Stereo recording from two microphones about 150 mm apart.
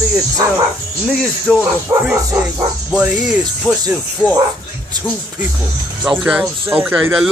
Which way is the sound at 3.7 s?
10° left (ahead or behind).